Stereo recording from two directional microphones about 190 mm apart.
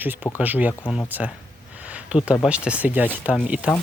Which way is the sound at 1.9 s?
5° right (ahead or behind).